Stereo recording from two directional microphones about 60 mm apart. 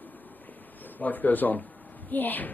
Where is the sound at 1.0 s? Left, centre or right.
Left.